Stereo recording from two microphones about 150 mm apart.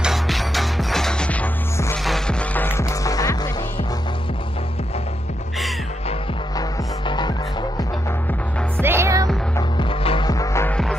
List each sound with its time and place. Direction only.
0.0 s music: centre (ahead or behind); by 3.3 s 25° left (ahead or behind)
7.1 s music: 30° left (ahead or behind)
8.7 s music: 15° right (ahead or behind)
9.6 s music: 35° left (ahead or behind)
10.3 s music: 20° left (ahead or behind)